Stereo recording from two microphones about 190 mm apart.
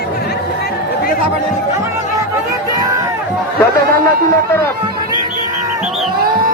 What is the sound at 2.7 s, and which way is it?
Run, 20° right (ahead or behind).